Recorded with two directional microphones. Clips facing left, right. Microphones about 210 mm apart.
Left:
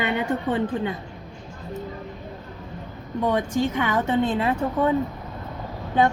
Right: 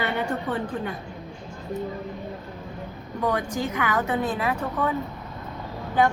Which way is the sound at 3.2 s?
25° left (ahead or behind).